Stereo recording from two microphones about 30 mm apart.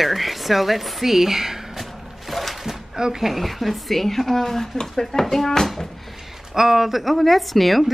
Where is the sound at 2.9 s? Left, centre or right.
Right.